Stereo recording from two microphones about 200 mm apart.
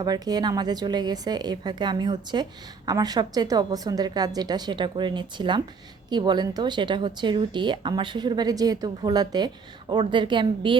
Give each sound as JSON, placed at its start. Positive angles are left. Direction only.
{"t": 0.0, "sound": "a woman's voice", "side_deg": -20}